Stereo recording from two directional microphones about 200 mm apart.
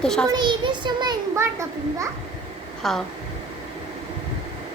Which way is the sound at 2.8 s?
Centre (ahead or behind).